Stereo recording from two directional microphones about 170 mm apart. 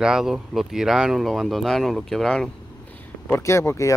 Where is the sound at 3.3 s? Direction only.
15° left (ahead or behind).